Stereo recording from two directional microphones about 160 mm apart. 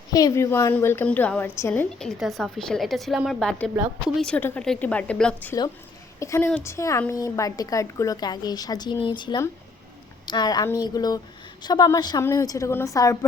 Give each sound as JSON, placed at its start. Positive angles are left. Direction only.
{"t": 0.1, "sound": "a woman's voice", "side_deg": 25}